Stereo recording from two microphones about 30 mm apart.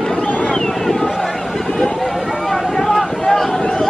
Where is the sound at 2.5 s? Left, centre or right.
Centre.